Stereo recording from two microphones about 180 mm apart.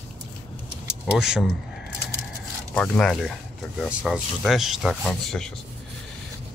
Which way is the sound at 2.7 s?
5° left (ahead or behind).